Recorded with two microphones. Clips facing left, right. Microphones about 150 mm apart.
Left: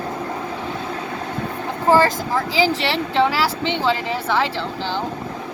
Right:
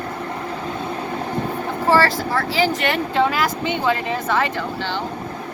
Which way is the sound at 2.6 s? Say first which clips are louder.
Left 2 dB; 90° left.